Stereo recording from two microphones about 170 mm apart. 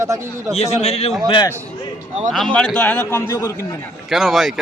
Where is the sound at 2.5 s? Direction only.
5° left (ahead or behind).